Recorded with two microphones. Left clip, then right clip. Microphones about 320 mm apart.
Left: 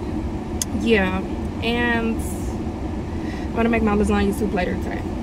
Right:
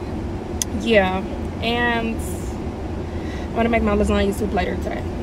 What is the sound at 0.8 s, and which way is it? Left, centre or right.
Speech, centre.